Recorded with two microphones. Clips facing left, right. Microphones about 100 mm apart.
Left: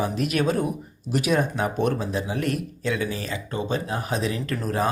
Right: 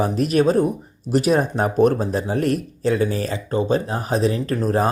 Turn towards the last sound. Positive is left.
turn(degrees=-35)  # may be behind; listen again after turning